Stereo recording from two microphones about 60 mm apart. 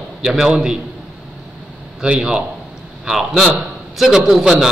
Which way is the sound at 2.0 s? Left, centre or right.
Centre.